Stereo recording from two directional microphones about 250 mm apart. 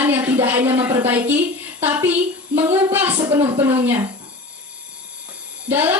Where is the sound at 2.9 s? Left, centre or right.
Centre.